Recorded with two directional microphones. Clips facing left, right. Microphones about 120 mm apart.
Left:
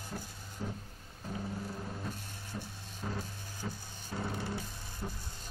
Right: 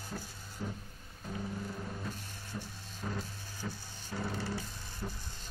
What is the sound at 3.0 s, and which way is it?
Music, 15° left (ahead or behind).